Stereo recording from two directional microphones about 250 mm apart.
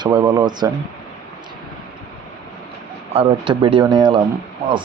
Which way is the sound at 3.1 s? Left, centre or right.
Right.